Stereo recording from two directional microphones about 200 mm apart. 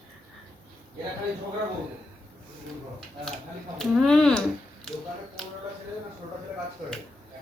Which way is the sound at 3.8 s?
Centre (ahead or behind).